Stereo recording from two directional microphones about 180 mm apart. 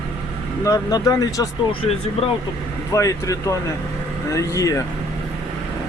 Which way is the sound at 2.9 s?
15° left (ahead or behind).